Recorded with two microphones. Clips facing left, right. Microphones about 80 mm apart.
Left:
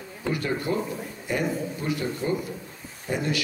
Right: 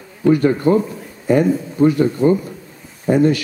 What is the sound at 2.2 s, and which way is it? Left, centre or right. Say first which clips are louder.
Speech: right 14 dB; right.